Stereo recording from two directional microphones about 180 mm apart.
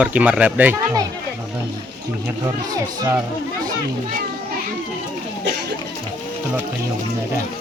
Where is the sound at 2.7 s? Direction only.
20° right (ahead or behind).